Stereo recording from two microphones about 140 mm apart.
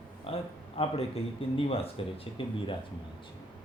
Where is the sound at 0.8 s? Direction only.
45° left (ahead or behind).